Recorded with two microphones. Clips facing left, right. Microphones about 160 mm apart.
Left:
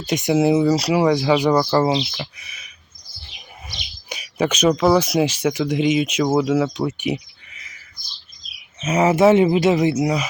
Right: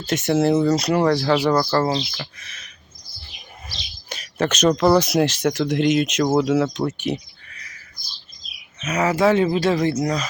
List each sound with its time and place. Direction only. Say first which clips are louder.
0.1 s speech: left 1 dB; 15° left (ahead or behind)
0.3 s speech: left 1 dB; 5° left (ahead or behind)
4.1 s speech: left 1 dB; 10° left (ahead or behind)
6.8 s a sound: left 1 dB; 10° left (ahead or behind)
8.8 s speech: left 4 dB; 25° left (ahead or behind)